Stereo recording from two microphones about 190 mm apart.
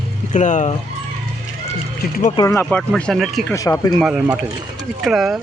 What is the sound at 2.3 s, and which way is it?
Speech, 15° left (ahead or behind).